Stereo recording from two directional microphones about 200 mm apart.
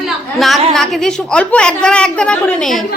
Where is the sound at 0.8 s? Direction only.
Centre (ahead or behind).